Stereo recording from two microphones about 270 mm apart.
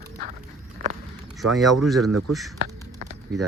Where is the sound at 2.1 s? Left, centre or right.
Right.